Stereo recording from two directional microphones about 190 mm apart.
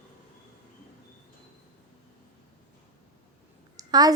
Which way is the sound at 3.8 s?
20° right (ahead or behind).